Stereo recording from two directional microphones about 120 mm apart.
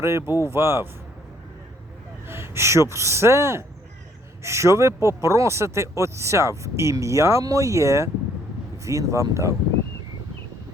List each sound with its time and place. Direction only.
0.0 s speech: 20° right (ahead or behind)
2.2 s speech: 20° right (ahead or behind)